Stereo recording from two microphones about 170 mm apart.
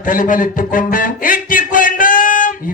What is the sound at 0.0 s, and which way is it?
Speech, 55° left (ahead or behind).